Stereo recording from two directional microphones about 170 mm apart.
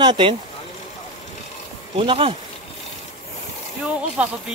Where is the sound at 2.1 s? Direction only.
30° right (ahead or behind).